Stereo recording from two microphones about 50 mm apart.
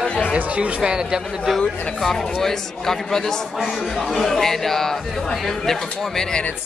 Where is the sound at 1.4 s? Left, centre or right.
Centre.